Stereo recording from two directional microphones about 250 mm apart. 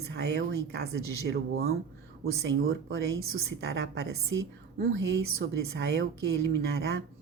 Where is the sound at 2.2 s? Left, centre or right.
Right.